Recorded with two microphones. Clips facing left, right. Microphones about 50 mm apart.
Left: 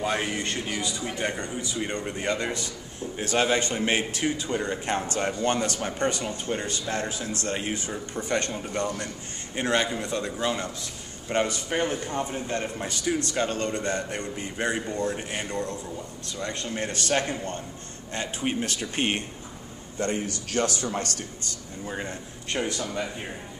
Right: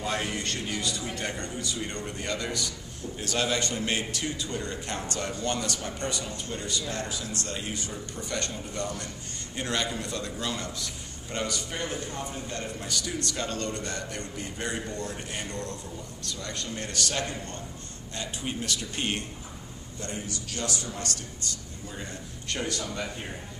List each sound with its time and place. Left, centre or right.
0.0 s a man's voice: centre
20.0 s a man's voice: left
22.5 s speech: centre